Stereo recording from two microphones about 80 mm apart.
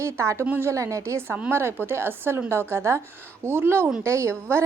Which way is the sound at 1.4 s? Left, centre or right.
Right.